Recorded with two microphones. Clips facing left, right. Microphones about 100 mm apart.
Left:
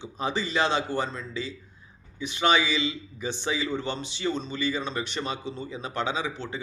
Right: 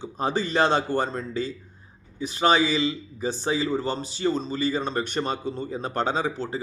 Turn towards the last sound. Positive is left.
turn(degrees=-40)  # may be behind; listen again after turning